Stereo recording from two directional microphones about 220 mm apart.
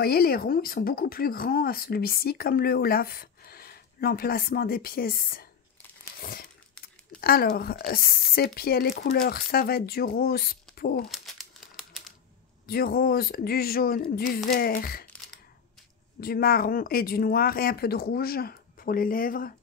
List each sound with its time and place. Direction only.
0.0 s speech: 45° left (ahead or behind)
6.2 s crumpling: 40° left (ahead or behind)
7.2 s speech: 45° left (ahead or behind)
11.1 s crumpling: centre (ahead or behind)
12.6 s speech: 40° left (ahead or behind)
16.2 s speech: 40° left (ahead or behind)